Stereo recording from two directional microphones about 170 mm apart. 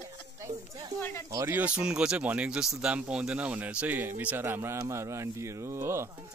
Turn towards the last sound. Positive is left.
turn(degrees=-15)  # may be behind; listen again after turning